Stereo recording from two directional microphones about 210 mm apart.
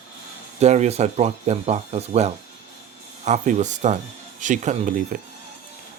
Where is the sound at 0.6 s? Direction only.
30° right (ahead or behind).